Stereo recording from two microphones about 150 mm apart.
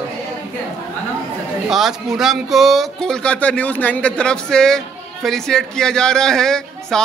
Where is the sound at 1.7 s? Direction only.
Centre (ahead or behind).